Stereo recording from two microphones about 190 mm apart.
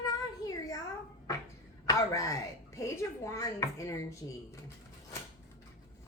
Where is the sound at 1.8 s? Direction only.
15° left (ahead or behind).